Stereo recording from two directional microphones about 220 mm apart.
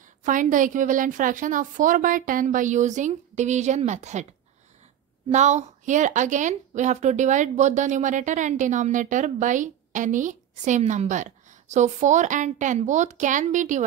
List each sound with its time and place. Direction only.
0.2 s a woman's voice: 35° right (ahead or behind)
5.3 s a woman's voice: 30° right (ahead or behind)